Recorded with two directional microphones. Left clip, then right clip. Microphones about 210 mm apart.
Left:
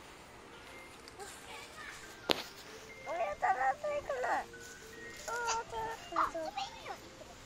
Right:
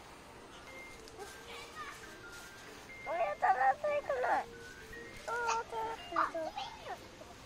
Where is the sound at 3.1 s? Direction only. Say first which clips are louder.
Right 2 dB; 5° right (ahead or behind).